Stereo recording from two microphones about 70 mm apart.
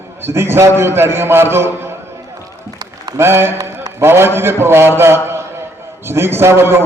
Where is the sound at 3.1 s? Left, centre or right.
Right.